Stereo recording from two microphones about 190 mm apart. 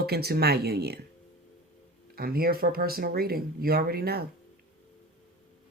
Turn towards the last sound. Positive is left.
turn(degrees=-55)  # may be behind; listen again after turning